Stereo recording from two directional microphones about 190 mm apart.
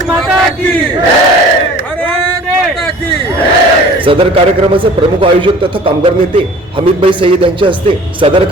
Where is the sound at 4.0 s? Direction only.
30° right (ahead or behind).